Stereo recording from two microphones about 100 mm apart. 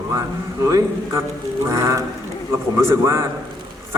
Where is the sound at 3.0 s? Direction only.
30° right (ahead or behind).